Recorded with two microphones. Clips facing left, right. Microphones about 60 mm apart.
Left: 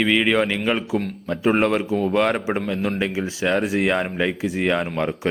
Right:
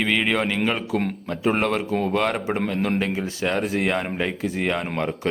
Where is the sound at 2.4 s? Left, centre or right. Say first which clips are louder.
Left 1 dB; centre.